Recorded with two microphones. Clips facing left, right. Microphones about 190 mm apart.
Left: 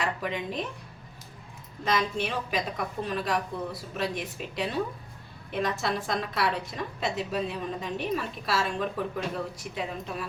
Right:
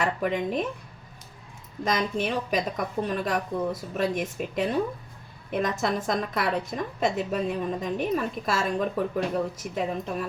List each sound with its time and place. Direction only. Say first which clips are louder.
0.0 s speech: right 5 dB; 50° right (ahead or behind)
1.8 s a woman's voice: right 2 dB; 45° right (ahead or behind)